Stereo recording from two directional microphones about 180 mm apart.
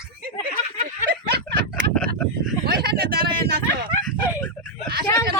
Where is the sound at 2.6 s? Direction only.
60° right (ahead or behind).